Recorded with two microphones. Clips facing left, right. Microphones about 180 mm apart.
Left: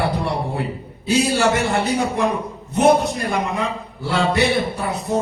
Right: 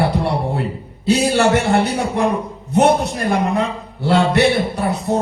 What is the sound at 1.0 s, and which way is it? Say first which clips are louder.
A man's voice: right 3 dB; 70° right (ahead or behind).